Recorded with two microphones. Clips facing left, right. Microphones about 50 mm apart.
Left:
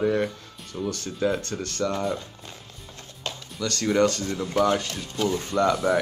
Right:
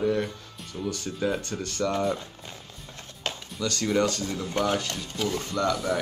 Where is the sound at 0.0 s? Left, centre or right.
Centre.